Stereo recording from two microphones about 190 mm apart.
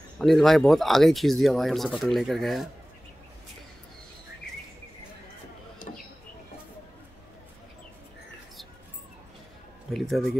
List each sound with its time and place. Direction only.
0.2 s speech: centre (ahead or behind)
5.8 s a sound: 45° left (ahead or behind)
9.9 s speech: centre (ahead or behind)